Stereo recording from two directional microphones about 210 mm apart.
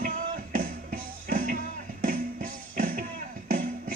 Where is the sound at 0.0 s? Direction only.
40° right (ahead or behind).